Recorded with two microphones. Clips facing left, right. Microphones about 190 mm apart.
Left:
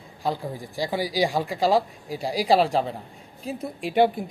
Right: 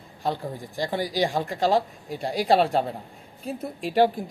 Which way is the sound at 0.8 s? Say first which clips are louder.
Left 1 dB; 5° left (ahead or behind).